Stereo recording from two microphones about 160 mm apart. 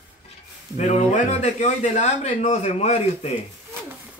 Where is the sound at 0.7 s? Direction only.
45° left (ahead or behind).